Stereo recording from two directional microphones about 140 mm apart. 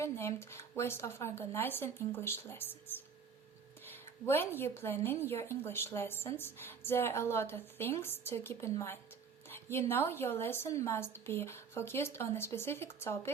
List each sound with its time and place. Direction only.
0.0 s a woman's voice: 20° left (ahead or behind)
3.8 s a woman's voice: 15° left (ahead or behind)